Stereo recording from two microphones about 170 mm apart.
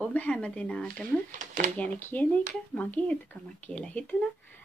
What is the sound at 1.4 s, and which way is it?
Speech, 45° right (ahead or behind).